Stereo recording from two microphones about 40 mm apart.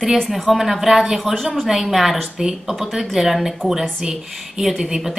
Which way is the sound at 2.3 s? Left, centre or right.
Centre.